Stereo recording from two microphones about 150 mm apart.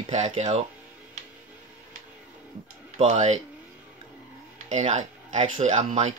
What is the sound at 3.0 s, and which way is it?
Speech, 50° right (ahead or behind).